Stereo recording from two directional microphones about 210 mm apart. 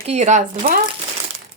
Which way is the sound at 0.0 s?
30° right (ahead or behind).